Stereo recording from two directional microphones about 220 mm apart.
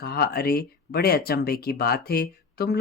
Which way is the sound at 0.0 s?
45° left (ahead or behind).